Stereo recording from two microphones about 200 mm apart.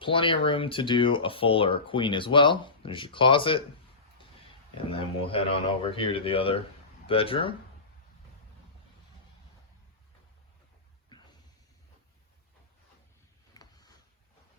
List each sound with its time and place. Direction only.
0.0 s speech: 25° left (ahead or behind)
4.9 s speech: 25° left (ahead or behind)
13.5 s a sound: 20° left (ahead or behind)